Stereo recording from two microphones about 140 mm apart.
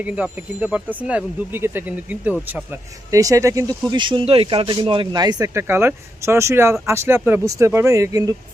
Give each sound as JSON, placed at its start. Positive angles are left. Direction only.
{"t": 0.0, "sound": "speech", "side_deg": -10}
{"t": 3.1, "sound": "speech", "side_deg": -25}
{"t": 5.5, "sound": "speech", "side_deg": -15}